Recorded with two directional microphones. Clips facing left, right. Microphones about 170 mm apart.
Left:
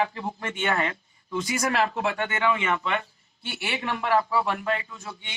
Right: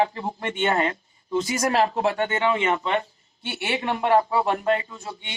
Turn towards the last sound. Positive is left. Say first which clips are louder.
# right 5 dB
turn(degrees=-30)  # may be behind; listen again after turning